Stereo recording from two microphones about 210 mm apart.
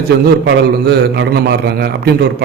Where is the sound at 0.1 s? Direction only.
50° right (ahead or behind).